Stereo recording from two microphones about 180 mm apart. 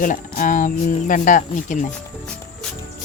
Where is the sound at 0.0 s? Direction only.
45° left (ahead or behind).